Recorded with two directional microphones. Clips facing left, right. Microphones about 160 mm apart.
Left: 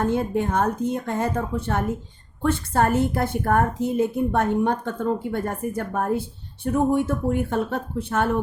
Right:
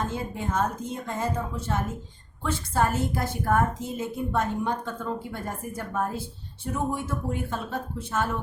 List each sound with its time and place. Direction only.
0.0 s a woman's voice: 60° left (ahead or behind)